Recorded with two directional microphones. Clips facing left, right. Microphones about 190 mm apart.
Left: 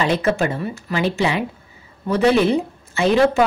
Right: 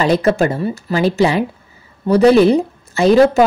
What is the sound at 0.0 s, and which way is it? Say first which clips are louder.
Speech: right 5 dB; 40° right (ahead or behind).